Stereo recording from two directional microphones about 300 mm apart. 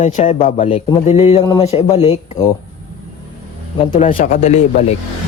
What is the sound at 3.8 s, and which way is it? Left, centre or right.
A man's voice, centre.